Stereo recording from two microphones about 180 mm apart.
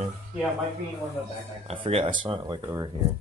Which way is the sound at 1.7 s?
30° right (ahead or behind).